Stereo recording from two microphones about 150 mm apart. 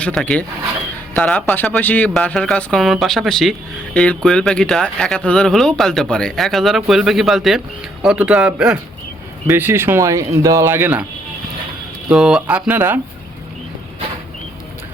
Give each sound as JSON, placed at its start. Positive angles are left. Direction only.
{"t": 0.0, "sound": "speech", "side_deg": 5}
{"t": 12.0, "sound": "speech", "side_deg": 0}